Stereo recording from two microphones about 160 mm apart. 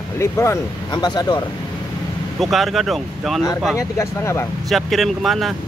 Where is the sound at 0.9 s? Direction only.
25° left (ahead or behind).